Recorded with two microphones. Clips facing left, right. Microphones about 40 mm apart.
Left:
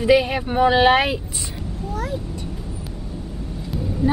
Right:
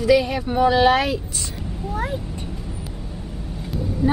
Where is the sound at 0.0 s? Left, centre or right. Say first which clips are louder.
Left 1 dB; left.